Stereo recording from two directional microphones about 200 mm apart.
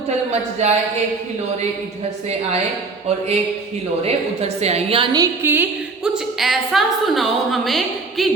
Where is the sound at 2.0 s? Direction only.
35° right (ahead or behind).